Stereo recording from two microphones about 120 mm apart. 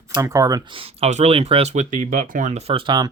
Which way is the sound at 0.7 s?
55° right (ahead or behind).